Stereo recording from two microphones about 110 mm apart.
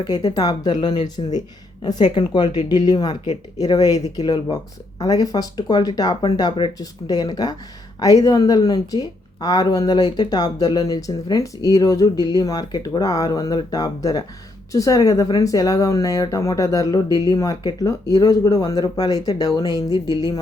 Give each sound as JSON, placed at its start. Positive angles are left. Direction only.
{"t": 0.0, "sound": "speech", "side_deg": 40}